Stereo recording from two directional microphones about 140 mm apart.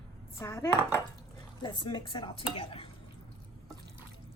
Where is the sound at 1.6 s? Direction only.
35° left (ahead or behind).